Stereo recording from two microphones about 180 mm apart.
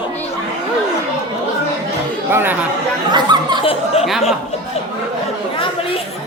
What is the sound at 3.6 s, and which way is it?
Speech, 30° left (ahead or behind).